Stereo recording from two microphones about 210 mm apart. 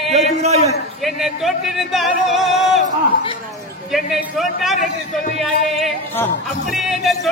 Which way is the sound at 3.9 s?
Centre (ahead or behind).